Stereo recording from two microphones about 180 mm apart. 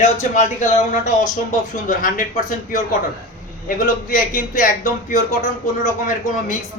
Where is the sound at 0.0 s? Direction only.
40° left (ahead or behind).